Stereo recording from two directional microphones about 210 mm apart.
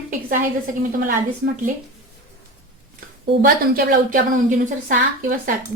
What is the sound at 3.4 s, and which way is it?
A woman's voice, 40° right (ahead or behind).